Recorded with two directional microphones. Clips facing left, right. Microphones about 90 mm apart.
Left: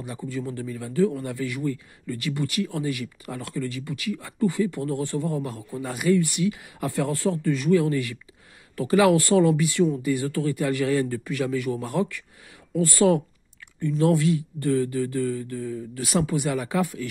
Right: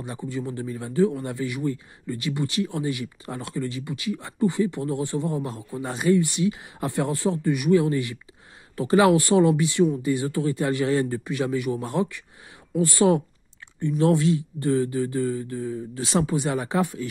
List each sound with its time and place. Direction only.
0.0 s speech: 25° right (ahead or behind)